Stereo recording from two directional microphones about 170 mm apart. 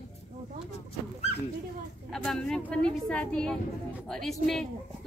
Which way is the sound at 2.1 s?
5° left (ahead or behind).